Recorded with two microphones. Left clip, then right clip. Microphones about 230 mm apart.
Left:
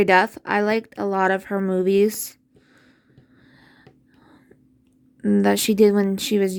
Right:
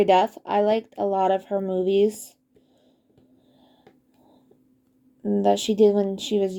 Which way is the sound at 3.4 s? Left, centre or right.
Left.